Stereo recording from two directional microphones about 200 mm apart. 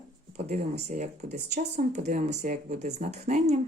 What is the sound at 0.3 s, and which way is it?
Speech, 35° right (ahead or behind).